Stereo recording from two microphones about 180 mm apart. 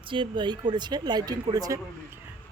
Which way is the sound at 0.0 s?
25° right (ahead or behind).